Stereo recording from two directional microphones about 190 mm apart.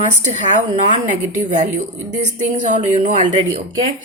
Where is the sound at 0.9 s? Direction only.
40° right (ahead or behind).